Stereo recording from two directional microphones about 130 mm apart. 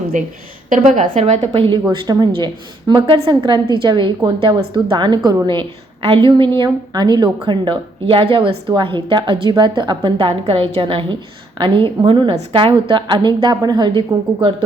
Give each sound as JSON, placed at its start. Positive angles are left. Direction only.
{"t": 0.1, "sound": "a woman's voice", "side_deg": -75}
{"t": 1.5, "sound": "a woman's voice", "side_deg": -45}